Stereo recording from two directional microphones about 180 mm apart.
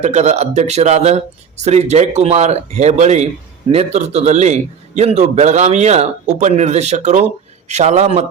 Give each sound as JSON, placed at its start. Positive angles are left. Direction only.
{"t": 0.0, "sound": "a man's voice", "side_deg": -40}